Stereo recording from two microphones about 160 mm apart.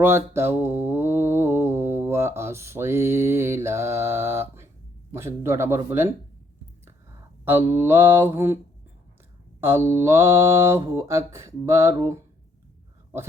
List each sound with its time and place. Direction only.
0.0 s mantra: 15° right (ahead or behind)
7.4 s mantra: 15° right (ahead or behind)
9.6 s mantra: 15° right (ahead or behind)